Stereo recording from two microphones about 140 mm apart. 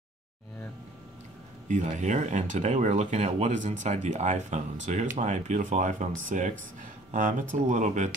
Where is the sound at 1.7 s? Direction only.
60° right (ahead or behind).